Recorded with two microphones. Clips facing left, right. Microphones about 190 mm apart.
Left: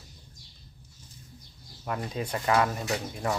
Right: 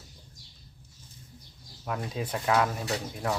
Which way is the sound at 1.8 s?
Centre (ahead or behind).